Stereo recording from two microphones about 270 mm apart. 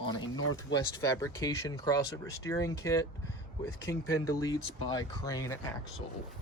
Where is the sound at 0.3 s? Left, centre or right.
Left.